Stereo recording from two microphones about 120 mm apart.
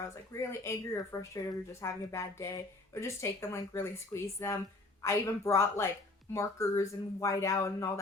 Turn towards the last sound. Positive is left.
turn(degrees=25)  # may be behind; listen again after turning